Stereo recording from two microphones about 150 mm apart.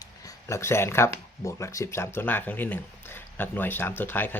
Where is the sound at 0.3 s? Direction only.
20° left (ahead or behind).